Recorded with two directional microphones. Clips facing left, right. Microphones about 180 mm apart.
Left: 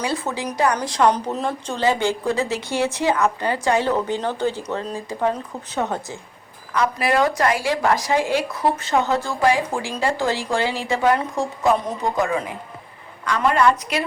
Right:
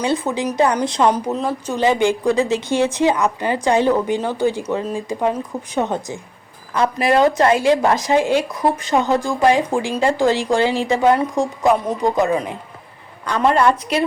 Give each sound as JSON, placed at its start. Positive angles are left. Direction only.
{"t": 0.5, "sound": "speech", "side_deg": -25}
{"t": 1.1, "sound": "speech", "side_deg": -5}
{"t": 13.2, "sound": "a woman's voice", "side_deg": -30}